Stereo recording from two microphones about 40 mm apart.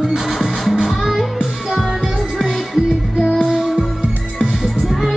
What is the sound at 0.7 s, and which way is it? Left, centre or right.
Music, centre.